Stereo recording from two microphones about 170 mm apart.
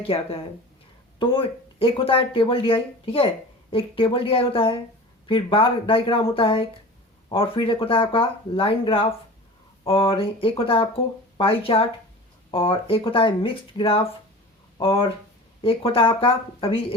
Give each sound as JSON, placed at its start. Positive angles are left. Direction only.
{"t": 0.0, "sound": "speech", "side_deg": 35}